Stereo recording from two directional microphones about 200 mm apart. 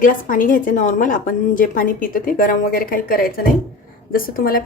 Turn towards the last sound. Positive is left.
turn(degrees=45)  # may be behind; listen again after turning